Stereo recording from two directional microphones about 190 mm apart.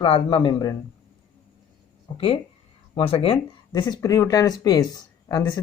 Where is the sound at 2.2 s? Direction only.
30° left (ahead or behind).